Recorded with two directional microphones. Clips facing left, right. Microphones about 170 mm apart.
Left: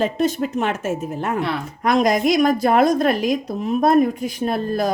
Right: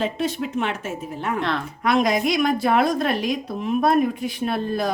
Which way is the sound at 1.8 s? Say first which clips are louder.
Left 3 dB; 45° left (ahead or behind).